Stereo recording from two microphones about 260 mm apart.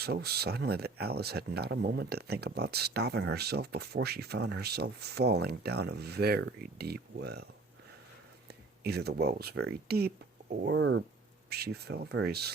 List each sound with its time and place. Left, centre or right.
0.0 s speech: right
8.4 s speech: right